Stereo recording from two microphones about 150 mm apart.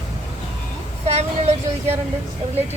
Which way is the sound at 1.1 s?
45° right (ahead or behind).